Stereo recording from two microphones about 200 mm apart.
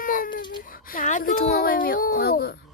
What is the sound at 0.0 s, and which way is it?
Baby cry, 45° left (ahead or behind).